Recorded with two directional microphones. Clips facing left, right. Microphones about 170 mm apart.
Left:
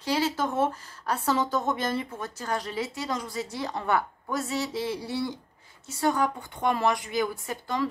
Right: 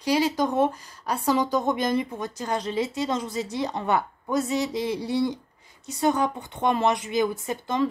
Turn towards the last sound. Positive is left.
turn(degrees=-20)  # may be behind; listen again after turning